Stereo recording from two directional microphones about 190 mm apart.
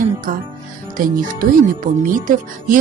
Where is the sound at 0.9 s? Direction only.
45° right (ahead or behind).